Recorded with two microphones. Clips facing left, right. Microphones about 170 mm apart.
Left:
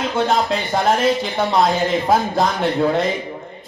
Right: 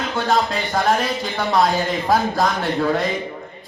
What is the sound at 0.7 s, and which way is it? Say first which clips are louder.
Music: left 3 dB; 20° left (ahead or behind).